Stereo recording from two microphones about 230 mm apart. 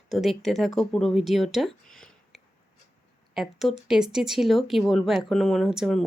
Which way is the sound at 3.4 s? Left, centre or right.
Centre.